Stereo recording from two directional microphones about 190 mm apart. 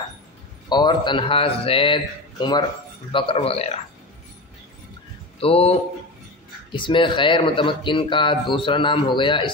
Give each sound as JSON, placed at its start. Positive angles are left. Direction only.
{"t": 0.7, "sound": "speech", "side_deg": 25}
{"t": 3.1, "sound": "a man's voice", "side_deg": 25}
{"t": 5.4, "sound": "a man's voice", "side_deg": 30}